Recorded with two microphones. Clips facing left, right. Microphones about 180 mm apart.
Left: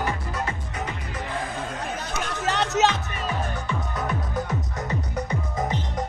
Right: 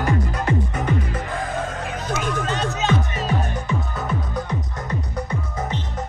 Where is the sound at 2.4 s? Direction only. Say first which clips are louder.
Left 2 dB; 75° left (ahead or behind).